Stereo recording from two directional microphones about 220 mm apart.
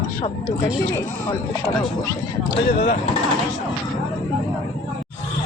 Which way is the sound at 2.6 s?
35° left (ahead or behind).